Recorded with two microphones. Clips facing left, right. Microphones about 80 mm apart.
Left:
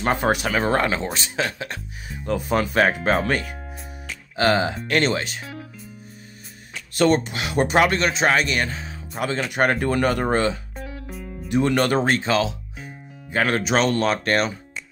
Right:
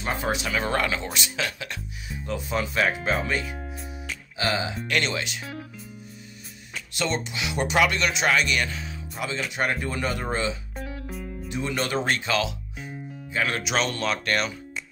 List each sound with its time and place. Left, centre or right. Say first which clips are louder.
0.0 s speech: left 6 dB; left
5.4 s speech: left 1 dB; centre
7.0 s speech: left 9 dB; left
10.8 s music: even; centre
11.4 s speech: left 9 dB; left
12.1 s speech: left 5 dB; left
13.3 s speech: left 6 dB; left